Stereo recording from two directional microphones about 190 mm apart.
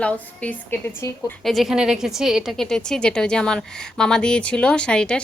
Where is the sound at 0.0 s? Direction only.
5° left (ahead or behind).